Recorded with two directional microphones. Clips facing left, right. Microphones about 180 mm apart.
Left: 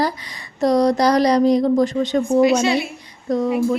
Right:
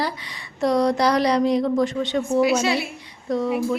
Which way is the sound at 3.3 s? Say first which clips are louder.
Left 3 dB; 40° left (ahead or behind).